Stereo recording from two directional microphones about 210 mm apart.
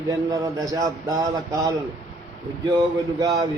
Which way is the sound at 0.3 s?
15° right (ahead or behind).